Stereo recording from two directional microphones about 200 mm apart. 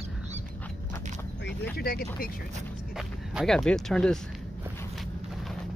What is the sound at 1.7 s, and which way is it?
Speech, 50° left (ahead or behind).